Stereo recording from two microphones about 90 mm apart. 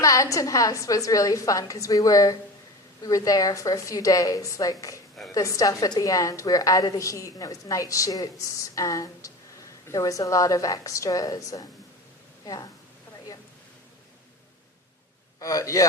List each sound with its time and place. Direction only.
0.0 s a woman's voice: 40° left (ahead or behind)
15.4 s a woman's voice: 40° left (ahead or behind)